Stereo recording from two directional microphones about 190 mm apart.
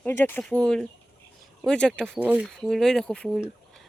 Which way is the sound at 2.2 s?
5° right (ahead or behind).